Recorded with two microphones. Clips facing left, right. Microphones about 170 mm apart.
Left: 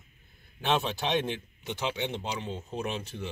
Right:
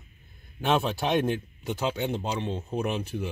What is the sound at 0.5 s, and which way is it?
A man's voice, 10° right (ahead or behind).